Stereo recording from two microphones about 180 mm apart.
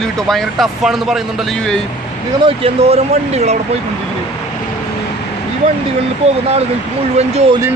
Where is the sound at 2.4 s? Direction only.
30° right (ahead or behind).